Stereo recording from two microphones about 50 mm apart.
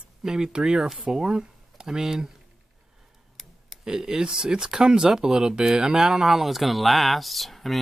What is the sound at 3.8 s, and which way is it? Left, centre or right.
Speech, centre.